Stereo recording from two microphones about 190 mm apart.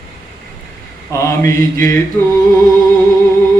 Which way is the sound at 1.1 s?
15° left (ahead or behind).